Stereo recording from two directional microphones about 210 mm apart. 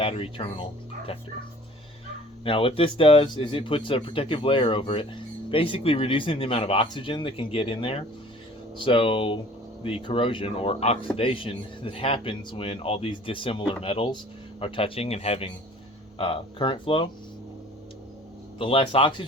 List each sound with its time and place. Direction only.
0.0 s speech: 25° left (ahead or behind)
2.4 s speech: 25° left (ahead or behind)
18.6 s speech: 25° left (ahead or behind)